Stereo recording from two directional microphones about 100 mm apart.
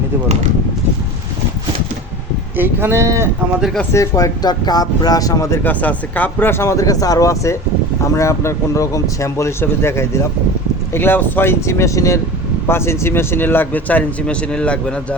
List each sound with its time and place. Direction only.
2.6 s speech: 20° right (ahead or behind)
3.9 s speech: 35° left (ahead or behind)
5.6 s a man's voice: 15° left (ahead or behind)